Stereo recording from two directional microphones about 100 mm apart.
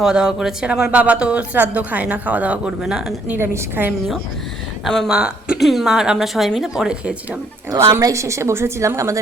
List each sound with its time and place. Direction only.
0.0 s speech: 5° right (ahead or behind)
3.2 s a woman's voice: 20° right (ahead or behind)
5.0 s speech: 10° right (ahead or behind)
7.8 s a woman's voice: 30° right (ahead or behind)